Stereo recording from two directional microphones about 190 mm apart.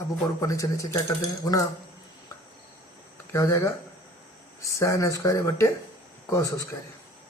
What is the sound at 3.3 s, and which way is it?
Speech, 15° left (ahead or behind).